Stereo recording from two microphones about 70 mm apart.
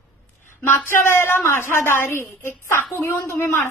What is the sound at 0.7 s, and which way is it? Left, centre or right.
A woman's voice, left.